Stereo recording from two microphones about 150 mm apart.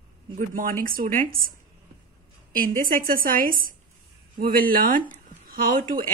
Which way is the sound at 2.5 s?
70° right (ahead or behind).